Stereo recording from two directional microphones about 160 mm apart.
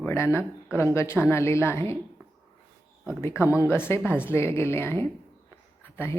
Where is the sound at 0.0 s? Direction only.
15° left (ahead or behind).